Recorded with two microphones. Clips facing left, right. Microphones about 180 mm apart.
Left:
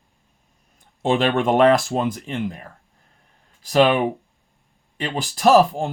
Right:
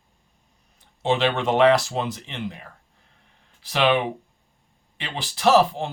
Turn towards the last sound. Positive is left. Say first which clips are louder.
# left 3 dB
turn(degrees=45)  # may be behind; listen again after turning